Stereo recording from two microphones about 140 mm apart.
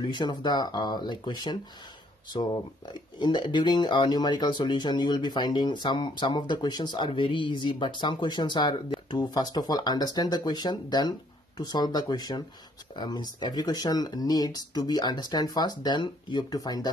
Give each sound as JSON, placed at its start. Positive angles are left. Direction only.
{"t": 0.0, "sound": "speech", "side_deg": 35}